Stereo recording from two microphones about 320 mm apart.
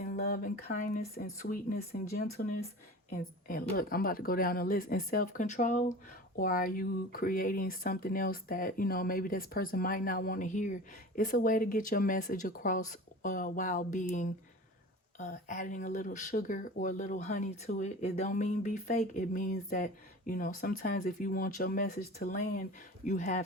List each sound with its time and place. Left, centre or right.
0.0 s speech: left